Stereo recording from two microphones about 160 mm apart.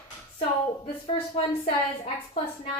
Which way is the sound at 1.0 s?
35° left (ahead or behind).